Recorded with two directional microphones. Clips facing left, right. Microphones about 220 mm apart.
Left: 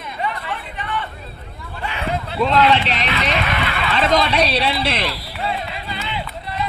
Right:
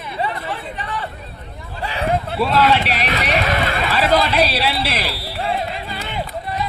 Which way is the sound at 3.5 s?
45° right (ahead or behind).